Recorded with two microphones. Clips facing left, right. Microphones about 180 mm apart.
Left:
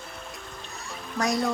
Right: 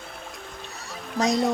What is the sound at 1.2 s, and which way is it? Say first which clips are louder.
Speech: right 3 dB; 20° right (ahead or behind).